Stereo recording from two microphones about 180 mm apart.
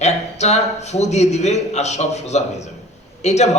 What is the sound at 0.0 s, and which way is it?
A man's voice, 40° left (ahead or behind).